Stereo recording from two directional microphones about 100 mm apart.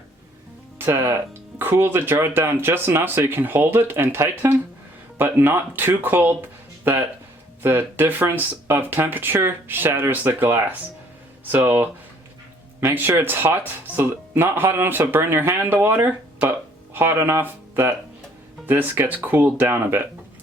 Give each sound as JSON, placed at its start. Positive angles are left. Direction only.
{"t": 0.8, "sound": "speech", "side_deg": -25}
{"t": 7.6, "sound": "speech", "side_deg": -20}